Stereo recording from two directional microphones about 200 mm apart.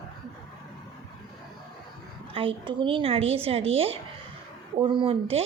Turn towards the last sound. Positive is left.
turn(degrees=-25)  # may be behind; listen again after turning